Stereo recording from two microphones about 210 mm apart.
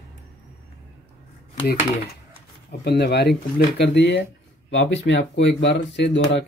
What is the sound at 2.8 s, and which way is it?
Speech, 50° left (ahead or behind).